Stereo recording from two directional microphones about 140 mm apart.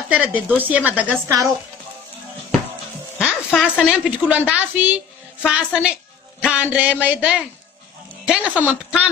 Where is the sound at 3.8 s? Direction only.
10° right (ahead or behind).